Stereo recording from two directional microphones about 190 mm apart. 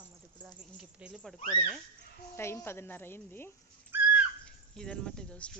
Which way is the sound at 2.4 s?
15° left (ahead or behind).